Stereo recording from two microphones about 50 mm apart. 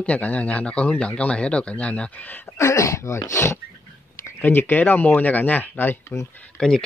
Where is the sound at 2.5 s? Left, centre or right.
Left.